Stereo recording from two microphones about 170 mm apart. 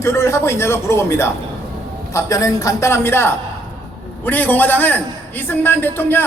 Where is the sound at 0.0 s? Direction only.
15° left (ahead or behind).